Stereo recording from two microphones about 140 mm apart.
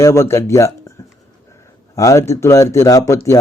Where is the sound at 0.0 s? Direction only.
20° left (ahead or behind).